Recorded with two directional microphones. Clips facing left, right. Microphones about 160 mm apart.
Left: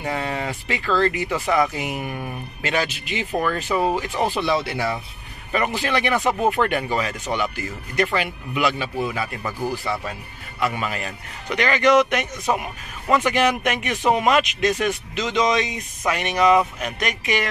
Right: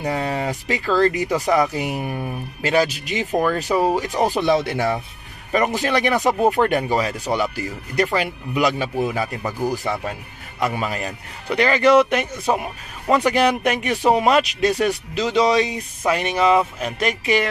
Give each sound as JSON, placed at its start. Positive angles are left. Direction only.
{"t": 0.0, "sound": "speech", "side_deg": -40}
{"t": 10.6, "sound": "speech", "side_deg": -35}